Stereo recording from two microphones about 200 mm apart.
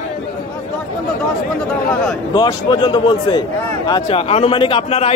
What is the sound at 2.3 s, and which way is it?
A man's voice, 20° left (ahead or behind).